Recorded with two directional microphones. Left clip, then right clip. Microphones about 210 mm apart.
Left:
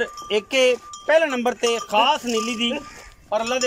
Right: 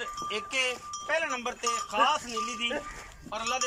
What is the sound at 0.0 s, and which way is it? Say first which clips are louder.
A man's voice: left 10 dB; 40° left (ahead or behind).